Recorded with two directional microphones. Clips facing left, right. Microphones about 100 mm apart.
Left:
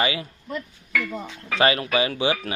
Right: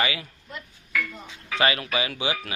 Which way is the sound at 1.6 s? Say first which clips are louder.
Left 4 dB; 35° left (ahead or behind).